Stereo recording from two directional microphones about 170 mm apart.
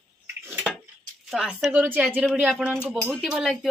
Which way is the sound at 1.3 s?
Centre (ahead or behind).